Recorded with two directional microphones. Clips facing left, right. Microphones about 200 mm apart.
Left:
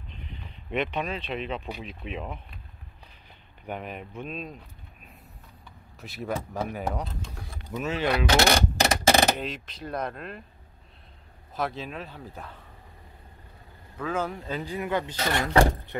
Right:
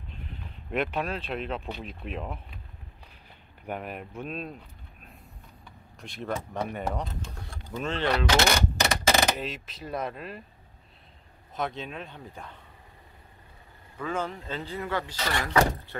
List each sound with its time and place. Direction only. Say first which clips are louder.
0.7 s speech: even; 5° right (ahead or behind)
3.6 s speech: even; 5° right (ahead or behind)
5.9 s speech: left 1 dB; 5° left (ahead or behind)
8.5 s a sound: left 3 dB; 35° left (ahead or behind)
9.4 s speech: left 1 dB; centre (ahead or behind)
11.5 s speech: left 1 dB; 5° left (ahead or behind)
13.9 s speech: left 2 dB; 5° left (ahead or behind); by 16.0 s 25° left (ahead or behind)